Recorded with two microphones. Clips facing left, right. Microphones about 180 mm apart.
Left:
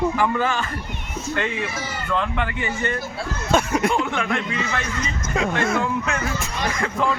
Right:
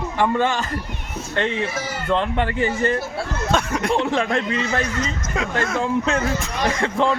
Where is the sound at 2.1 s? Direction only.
30° right (ahead or behind).